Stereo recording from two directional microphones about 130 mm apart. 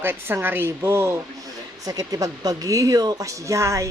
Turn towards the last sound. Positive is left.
turn(degrees=-25)  # may be behind; listen again after turning